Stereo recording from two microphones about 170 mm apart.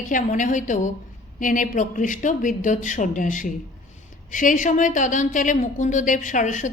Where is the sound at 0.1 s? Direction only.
50° left (ahead or behind).